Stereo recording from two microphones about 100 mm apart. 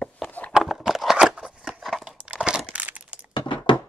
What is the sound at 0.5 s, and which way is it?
Scissors, 5° right (ahead or behind).